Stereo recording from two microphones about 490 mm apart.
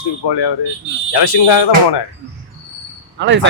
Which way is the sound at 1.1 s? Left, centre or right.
Left.